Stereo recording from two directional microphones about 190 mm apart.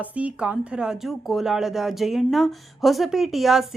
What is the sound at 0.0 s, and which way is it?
A woman's voice, 5° right (ahead or behind).